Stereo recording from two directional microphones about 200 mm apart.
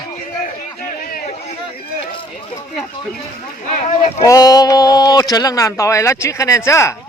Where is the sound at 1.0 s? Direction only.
45° left (ahead or behind).